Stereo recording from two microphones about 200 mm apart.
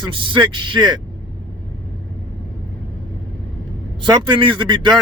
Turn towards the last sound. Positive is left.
turn(degrees=-25)  # may be behind; listen again after turning